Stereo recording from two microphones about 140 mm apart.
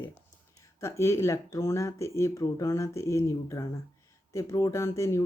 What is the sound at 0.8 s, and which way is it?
Speech, 20° left (ahead or behind).